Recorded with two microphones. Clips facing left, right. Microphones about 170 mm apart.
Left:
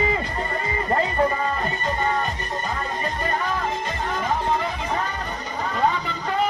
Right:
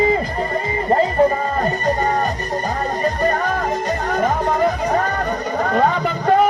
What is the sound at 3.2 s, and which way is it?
Music, 45° right (ahead or behind).